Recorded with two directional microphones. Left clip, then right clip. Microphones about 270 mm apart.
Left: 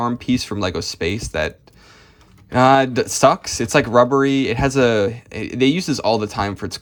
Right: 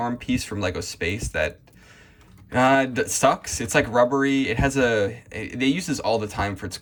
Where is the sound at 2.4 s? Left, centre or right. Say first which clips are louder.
Left 5 dB; centre.